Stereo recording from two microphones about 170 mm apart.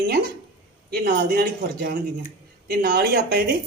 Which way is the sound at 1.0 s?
75° right (ahead or behind).